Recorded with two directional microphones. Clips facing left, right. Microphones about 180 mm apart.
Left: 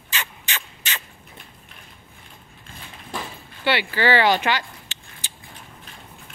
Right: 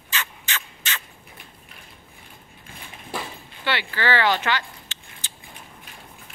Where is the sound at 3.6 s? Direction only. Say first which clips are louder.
Left 4 dB; 15° left (ahead or behind).